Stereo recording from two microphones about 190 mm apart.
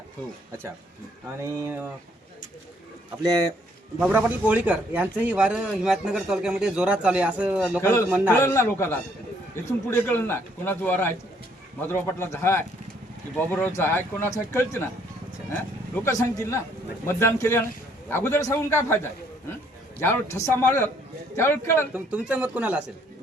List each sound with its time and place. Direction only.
1.4 s speech: 10° right (ahead or behind)
3.2 s speech: 20° right (ahead or behind)
4.0 s a man's voice: 10° right (ahead or behind)
7.8 s speech: 15° left (ahead or behind)
16.0 s speech: 15° left (ahead or behind)
21.9 s speech: 5° right (ahead or behind)